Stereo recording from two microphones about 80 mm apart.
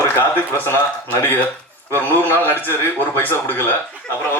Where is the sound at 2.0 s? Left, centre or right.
Left.